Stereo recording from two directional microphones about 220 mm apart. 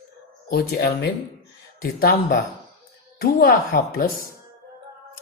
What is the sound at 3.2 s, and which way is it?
Speech, 40° left (ahead or behind).